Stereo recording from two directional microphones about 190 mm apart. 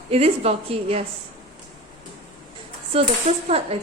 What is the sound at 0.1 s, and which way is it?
Speech, 30° right (ahead or behind).